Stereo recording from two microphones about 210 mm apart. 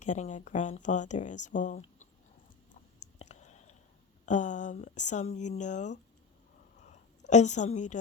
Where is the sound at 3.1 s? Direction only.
35° left (ahead or behind).